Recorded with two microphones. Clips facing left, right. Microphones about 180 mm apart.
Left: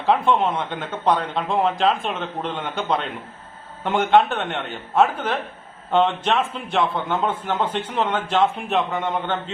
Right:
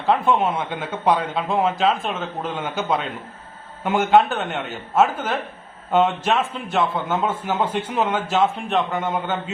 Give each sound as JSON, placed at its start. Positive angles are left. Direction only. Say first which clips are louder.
{"t": 0.0, "sound": "a man's voice", "louder": "even", "side_deg": 0}